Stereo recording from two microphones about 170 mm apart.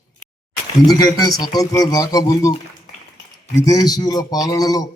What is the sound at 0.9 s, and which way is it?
A man's voice, 20° left (ahead or behind).